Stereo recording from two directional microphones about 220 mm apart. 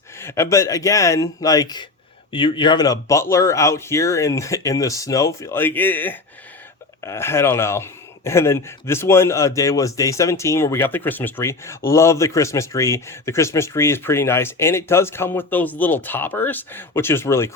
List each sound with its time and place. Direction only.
0.2 s speech: 10° left (ahead or behind)